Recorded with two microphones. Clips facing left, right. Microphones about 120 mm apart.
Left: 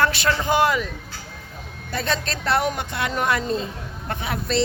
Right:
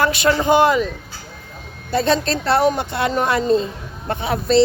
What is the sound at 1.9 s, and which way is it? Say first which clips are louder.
A woman's voice: right 8 dB; 30° right (ahead or behind).